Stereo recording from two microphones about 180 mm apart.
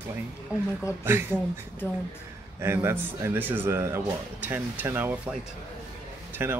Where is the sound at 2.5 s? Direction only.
15° right (ahead or behind).